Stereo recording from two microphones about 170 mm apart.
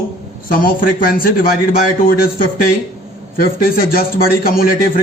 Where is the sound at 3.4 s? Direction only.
60° left (ahead or behind).